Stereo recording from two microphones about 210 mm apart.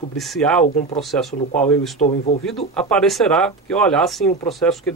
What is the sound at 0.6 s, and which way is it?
Speech, 40° left (ahead or behind).